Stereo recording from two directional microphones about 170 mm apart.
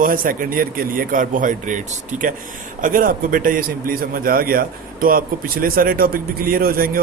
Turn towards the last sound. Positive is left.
turn(degrees=-60)  # may be behind; listen again after turning